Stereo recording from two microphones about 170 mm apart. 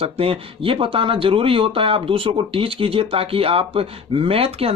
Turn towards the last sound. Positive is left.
turn(degrees=-35)  # may be behind; listen again after turning